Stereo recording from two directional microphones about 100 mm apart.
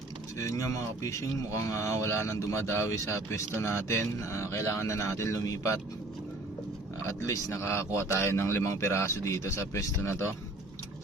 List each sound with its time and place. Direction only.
0.3 s a man's voice: 30° left (ahead or behind)
7.0 s a man's voice: 30° left (ahead or behind)